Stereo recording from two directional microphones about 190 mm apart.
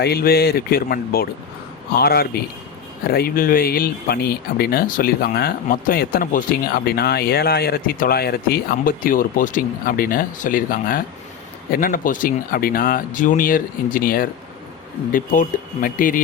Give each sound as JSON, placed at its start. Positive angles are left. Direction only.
{"t": 0.0, "sound": "speech", "side_deg": 55}